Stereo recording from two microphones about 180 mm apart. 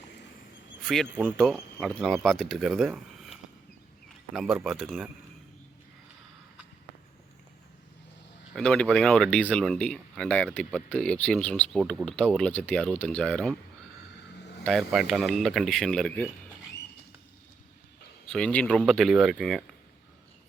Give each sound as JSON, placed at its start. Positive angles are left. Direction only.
{"t": 0.9, "sound": "speech", "side_deg": -5}
{"t": 4.4, "sound": "speech", "side_deg": -5}
{"t": 8.5, "sound": "speech", "side_deg": 5}
{"t": 14.6, "sound": "speech", "side_deg": 0}
{"t": 18.3, "sound": "speech", "side_deg": 5}